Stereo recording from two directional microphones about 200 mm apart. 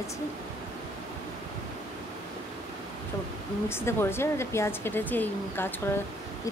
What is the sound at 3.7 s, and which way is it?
Speech, 10° left (ahead or behind).